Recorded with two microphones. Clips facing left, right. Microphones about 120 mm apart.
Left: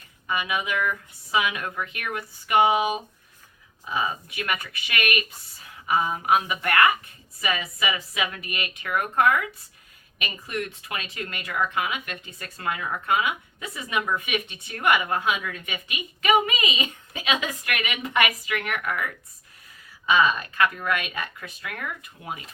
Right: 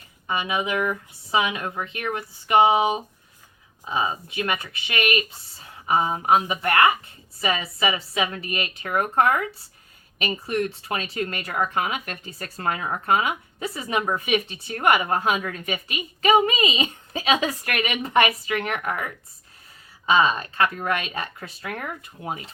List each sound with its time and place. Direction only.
0.3 s speech: 25° right (ahead or behind)